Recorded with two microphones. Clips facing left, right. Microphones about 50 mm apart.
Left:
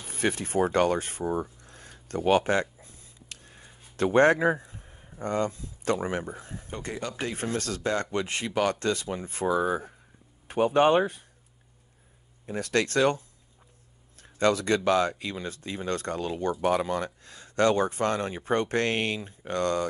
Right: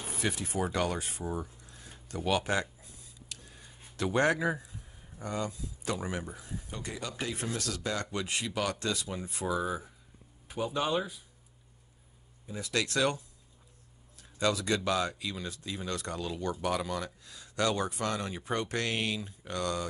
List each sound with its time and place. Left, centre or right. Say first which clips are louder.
0.2 s a sound: left 7 dB; left
5.2 s speech: left 7 dB; left
12.4 s speech: left 8 dB; left
12.7 s speech: left 6 dB; left
14.1 s a sound: left 6 dB; left
14.9 s speech: left 7 dB; left